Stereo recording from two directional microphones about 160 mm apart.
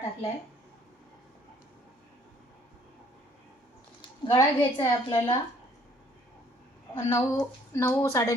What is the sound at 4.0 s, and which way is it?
A woman's voice, 30° left (ahead or behind).